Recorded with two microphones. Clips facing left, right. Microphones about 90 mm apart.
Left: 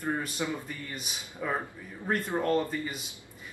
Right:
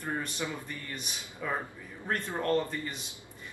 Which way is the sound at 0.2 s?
15° left (ahead or behind).